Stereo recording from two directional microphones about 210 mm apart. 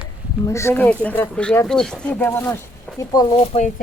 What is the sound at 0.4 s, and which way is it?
Speech, 15° left (ahead or behind).